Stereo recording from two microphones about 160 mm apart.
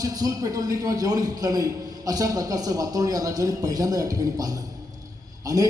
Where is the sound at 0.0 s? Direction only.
25° right (ahead or behind).